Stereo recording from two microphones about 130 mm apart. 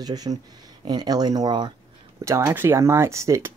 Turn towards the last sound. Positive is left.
turn(degrees=-25)  # may be behind; listen again after turning